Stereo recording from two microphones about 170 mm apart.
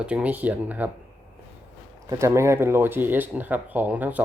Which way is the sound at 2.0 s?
15° right (ahead or behind).